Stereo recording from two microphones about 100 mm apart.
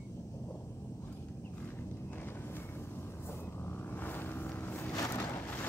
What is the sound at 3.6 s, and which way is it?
Vehicle, 20° left (ahead or behind).